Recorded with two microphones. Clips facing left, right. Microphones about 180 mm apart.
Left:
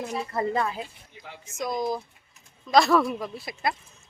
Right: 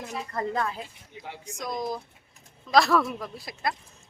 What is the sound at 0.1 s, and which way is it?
A woman's voice, 10° left (ahead or behind).